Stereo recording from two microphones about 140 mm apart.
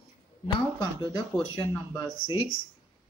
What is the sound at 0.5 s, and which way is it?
Speech, 35° left (ahead or behind).